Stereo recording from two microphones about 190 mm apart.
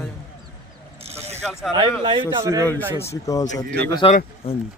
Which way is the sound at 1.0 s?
35° right (ahead or behind).